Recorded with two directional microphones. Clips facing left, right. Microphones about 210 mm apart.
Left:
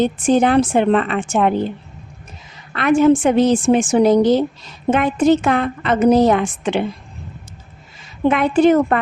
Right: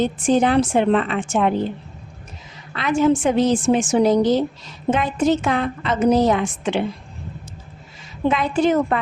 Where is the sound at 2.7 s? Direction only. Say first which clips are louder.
Left 5 dB; 60° left (ahead or behind).